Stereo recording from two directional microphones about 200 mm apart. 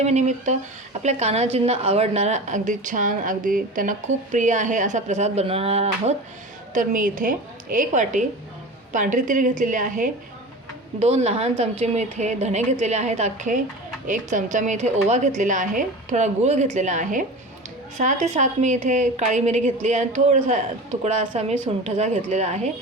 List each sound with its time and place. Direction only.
0.0 s a woman's voice: 35° right (ahead or behind)
6.7 s a woman's voice: 40° right (ahead or behind)